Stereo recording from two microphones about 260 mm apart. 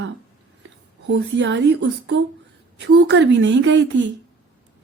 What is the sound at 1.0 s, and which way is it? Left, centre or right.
A woman's voice, right.